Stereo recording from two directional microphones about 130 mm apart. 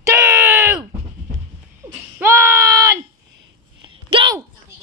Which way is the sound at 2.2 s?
20° right (ahead or behind).